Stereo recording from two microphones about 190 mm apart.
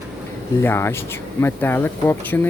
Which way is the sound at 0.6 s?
15° left (ahead or behind).